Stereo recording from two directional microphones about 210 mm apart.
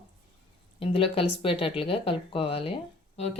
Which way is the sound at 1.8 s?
25° left (ahead or behind).